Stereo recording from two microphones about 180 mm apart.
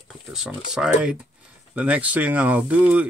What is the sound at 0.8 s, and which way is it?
Speech, 5° right (ahead or behind).